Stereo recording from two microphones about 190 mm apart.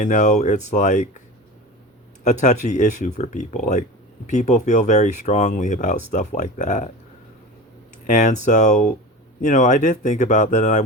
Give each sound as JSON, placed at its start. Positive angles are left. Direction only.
{"t": 0.0, "sound": "speech", "side_deg": 40}
{"t": 2.2, "sound": "speech", "side_deg": 40}
{"t": 8.0, "sound": "speech", "side_deg": 40}